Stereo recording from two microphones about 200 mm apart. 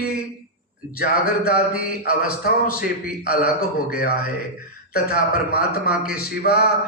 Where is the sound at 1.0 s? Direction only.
50° left (ahead or behind).